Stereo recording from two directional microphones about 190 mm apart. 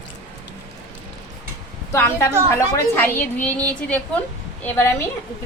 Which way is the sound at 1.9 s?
10° left (ahead or behind).